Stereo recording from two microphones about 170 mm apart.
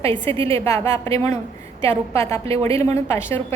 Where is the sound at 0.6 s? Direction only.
20° left (ahead or behind).